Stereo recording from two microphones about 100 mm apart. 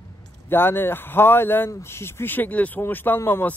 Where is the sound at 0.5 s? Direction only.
20° left (ahead or behind).